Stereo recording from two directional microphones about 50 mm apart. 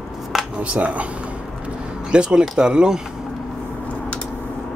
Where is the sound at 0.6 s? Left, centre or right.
Right.